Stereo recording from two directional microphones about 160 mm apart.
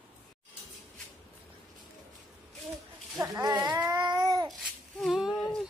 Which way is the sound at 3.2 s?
25° right (ahead or behind).